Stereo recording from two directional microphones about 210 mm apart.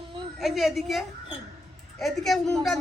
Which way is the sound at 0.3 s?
Centre (ahead or behind).